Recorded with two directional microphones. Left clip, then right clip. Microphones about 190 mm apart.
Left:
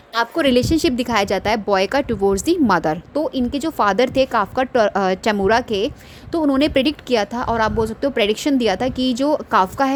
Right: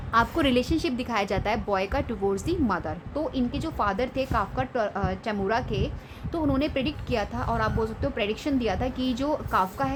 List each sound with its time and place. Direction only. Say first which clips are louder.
0.1 s a woman's voice: left 6 dB; 35° left (ahead or behind)
3.2 s a woman's voice: left 8 dB; 35° left (ahead or behind)